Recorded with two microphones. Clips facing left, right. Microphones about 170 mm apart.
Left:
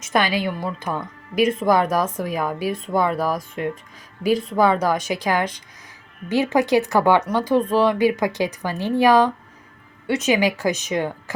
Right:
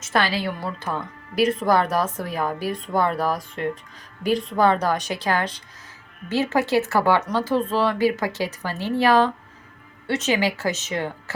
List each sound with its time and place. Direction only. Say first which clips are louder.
0.0 s speech: left 2 dB; 15° left (ahead or behind)